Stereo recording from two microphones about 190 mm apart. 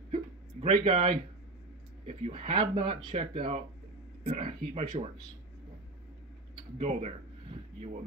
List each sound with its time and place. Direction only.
0.1 s a sound: 30° right (ahead or behind)
2.0 s speech: 30° right (ahead or behind)
6.8 s speech: 35° right (ahead or behind)